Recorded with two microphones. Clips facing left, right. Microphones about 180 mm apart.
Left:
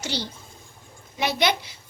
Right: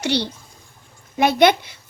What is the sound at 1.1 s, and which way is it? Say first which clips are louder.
Speech: right 9 dB; 50° right (ahead or behind).